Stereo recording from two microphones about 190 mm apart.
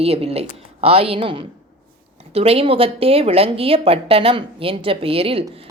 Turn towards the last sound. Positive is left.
turn(degrees=-30)  # may be behind; listen again after turning